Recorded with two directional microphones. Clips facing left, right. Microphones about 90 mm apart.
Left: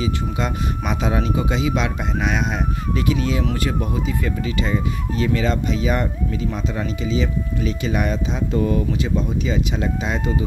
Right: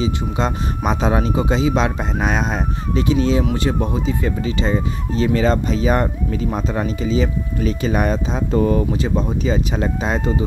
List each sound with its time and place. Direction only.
0.0 s speech: 35° right (ahead or behind)